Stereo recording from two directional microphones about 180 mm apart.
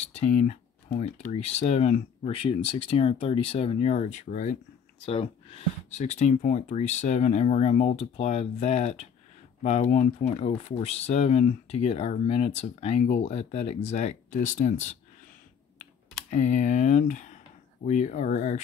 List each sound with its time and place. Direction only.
0.1 s speech: 35° left (ahead or behind)
5.0 s speech: 30° left (ahead or behind)
15.8 s computer keyboard: 40° left (ahead or behind)
17.8 s speech: 40° left (ahead or behind)